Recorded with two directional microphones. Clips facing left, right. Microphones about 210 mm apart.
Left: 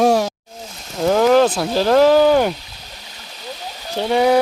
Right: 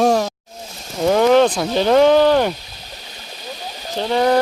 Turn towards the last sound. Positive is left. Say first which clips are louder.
# left 1 dB
turn(degrees=5)  # may be behind; listen again after turning